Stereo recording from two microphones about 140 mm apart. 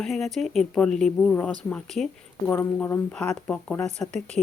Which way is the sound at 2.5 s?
15° left (ahead or behind).